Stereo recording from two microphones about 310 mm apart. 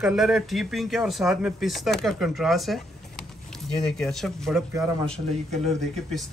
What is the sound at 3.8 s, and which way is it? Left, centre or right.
Speech, centre.